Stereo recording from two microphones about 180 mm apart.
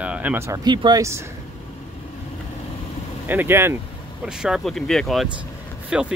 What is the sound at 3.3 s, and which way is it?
Speech, 10° right (ahead or behind).